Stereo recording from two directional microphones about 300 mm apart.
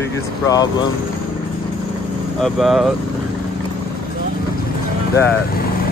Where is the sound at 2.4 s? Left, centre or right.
Centre.